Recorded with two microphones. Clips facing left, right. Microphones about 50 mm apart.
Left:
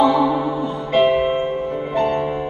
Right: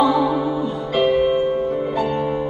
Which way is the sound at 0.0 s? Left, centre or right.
Left.